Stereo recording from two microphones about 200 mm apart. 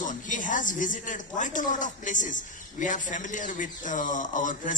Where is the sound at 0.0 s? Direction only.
40° left (ahead or behind).